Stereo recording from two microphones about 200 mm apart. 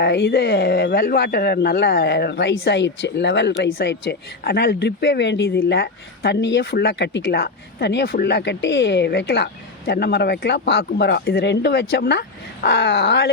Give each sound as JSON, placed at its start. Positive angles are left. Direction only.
{"t": 0.0, "sound": "speech", "side_deg": 55}